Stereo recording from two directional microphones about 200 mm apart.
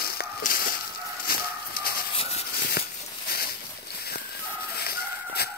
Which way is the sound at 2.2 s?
30° left (ahead or behind).